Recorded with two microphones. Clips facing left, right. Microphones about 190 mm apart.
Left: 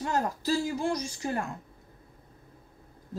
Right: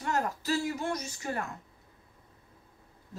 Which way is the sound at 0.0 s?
30° left (ahead or behind).